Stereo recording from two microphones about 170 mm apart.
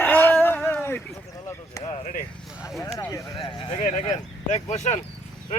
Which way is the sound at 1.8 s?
45° left (ahead or behind).